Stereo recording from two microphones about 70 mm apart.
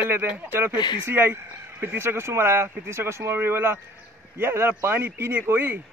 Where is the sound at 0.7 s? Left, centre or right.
Left.